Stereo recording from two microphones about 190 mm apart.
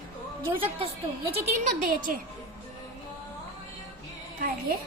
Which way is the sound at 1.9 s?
45° right (ahead or behind).